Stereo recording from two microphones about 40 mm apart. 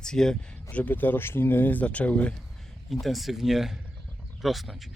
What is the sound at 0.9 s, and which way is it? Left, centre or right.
Speech, left.